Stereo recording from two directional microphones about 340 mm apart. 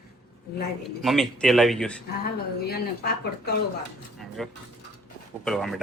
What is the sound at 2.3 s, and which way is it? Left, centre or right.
A woman's voice, left.